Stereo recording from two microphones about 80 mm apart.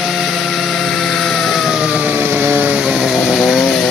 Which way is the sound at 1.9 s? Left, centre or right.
Right.